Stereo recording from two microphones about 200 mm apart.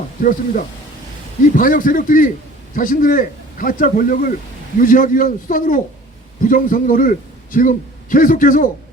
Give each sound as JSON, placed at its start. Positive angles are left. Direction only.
{"t": 0.2, "sound": "a man's voice", "side_deg": 40}